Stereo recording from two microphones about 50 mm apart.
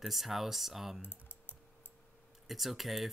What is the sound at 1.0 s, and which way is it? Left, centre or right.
Typing, left.